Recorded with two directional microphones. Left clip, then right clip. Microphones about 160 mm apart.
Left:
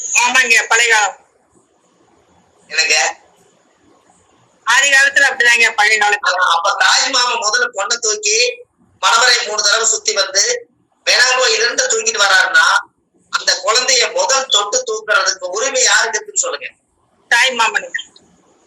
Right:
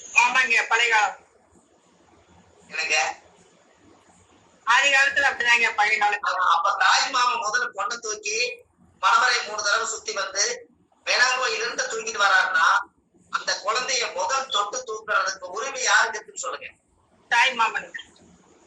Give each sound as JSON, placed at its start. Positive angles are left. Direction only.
{"t": 0.1, "sound": "a man's voice", "side_deg": 50}
{"t": 2.6, "sound": "a man's voice", "side_deg": 50}
{"t": 4.6, "sound": "a man's voice", "side_deg": 50}